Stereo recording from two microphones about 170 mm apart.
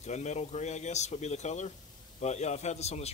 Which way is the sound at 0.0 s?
40° left (ahead or behind).